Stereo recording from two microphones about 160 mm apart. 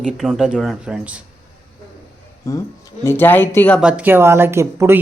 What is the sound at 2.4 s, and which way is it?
Speech, 20° left (ahead or behind).